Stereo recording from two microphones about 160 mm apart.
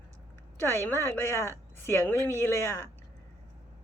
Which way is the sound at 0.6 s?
15° left (ahead or behind).